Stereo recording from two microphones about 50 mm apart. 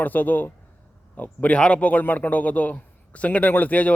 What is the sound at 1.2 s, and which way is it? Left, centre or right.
A man's voice, left.